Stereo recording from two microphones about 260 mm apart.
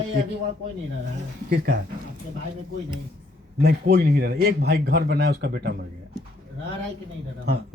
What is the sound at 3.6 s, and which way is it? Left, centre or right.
Speech, right.